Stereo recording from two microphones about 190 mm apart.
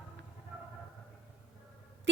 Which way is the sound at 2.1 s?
70° right (ahead or behind).